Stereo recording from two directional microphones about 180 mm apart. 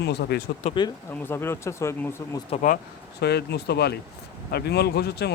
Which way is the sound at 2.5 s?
45° left (ahead or behind).